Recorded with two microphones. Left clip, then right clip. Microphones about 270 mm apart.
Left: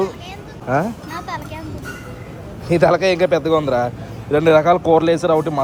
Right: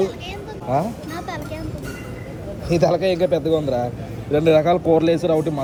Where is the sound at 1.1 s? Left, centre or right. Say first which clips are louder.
Left 2 dB; centre.